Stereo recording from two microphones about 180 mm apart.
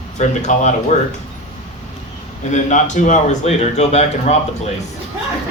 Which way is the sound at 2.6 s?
45° left (ahead or behind).